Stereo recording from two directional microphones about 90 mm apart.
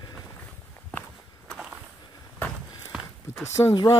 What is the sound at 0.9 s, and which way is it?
Walk, 10° left (ahead or behind).